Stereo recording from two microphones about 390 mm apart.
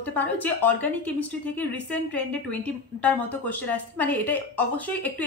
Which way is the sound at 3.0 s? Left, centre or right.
Centre.